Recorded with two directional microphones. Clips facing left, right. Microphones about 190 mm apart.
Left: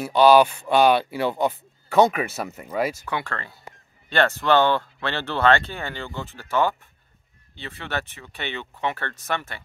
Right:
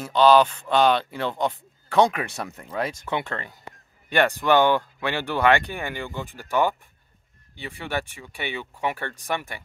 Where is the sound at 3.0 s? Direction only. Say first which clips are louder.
Right 1 dB; 20° right (ahead or behind).